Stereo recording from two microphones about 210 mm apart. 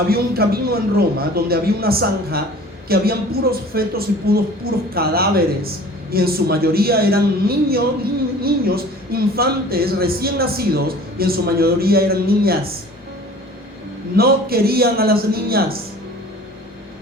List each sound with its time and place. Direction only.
0.1 s speech: 45° right (ahead or behind)
14.2 s speech: 45° right (ahead or behind)